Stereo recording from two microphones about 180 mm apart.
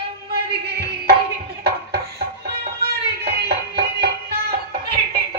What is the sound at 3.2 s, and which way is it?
Music, 60° right (ahead or behind).